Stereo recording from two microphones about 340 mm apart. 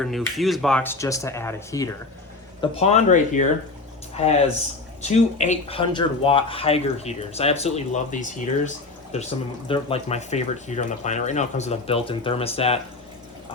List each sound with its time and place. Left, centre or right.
0.0 s speech: centre